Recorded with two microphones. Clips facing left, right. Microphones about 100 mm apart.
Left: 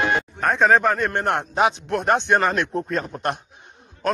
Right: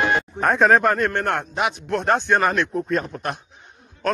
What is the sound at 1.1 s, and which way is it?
Speech, 20° left (ahead or behind).